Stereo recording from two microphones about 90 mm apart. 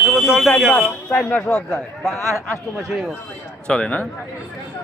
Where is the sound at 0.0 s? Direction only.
5° right (ahead or behind).